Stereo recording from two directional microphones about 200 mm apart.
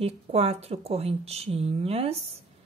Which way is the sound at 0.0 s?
30° right (ahead or behind).